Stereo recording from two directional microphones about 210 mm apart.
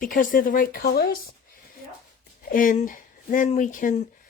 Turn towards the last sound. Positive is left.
turn(degrees=40)  # may be behind; listen again after turning